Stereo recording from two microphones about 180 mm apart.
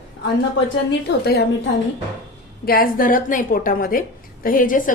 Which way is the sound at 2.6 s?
55° left (ahead or behind).